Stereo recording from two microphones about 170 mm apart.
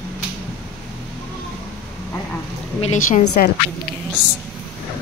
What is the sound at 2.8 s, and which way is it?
Speech, 50° left (ahead or behind).